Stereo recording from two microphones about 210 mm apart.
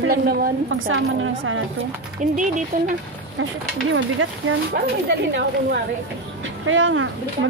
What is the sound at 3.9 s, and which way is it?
Speech, 65° right (ahead or behind).